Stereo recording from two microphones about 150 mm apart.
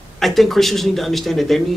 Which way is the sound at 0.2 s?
Centre (ahead or behind).